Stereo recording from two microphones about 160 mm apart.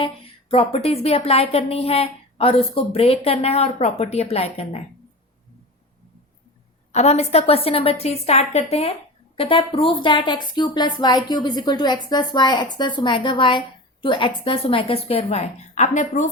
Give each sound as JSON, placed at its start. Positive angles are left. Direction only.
{"t": 0.0, "sound": "a woman's voice", "side_deg": 35}
{"t": 6.9, "sound": "a woman's voice", "side_deg": 45}